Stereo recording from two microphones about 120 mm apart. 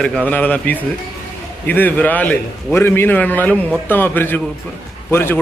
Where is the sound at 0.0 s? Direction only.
10° left (ahead or behind).